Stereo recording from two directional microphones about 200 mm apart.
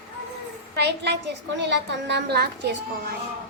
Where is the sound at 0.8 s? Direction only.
60° right (ahead or behind).